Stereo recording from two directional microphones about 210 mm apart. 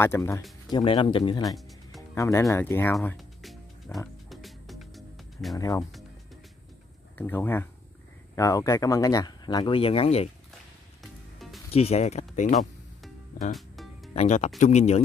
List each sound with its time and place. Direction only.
0.0 s speech: 10° left (ahead or behind)
2.0 s music: 15° left (ahead or behind)
2.5 s speech: 10° left (ahead or behind)
3.2 s music: centre (ahead or behind)
5.6 s speech: 15° left (ahead or behind)
7.2 s speech: 10° left (ahead or behind); by 10.3 s 30° left (ahead or behind)
11.0 s music: centre (ahead or behind)
11.7 s speech: 30° left (ahead or behind)
13.6 s music: centre (ahead or behind)
14.1 s speech: 30° left (ahead or behind)